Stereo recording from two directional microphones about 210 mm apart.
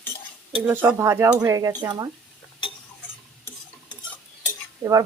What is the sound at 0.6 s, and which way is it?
Speech, 10° right (ahead or behind).